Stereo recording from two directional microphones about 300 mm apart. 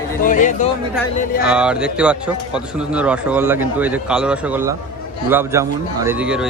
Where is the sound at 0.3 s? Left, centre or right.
Left.